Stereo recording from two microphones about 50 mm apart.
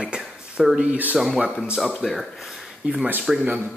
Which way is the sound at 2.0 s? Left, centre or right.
Centre.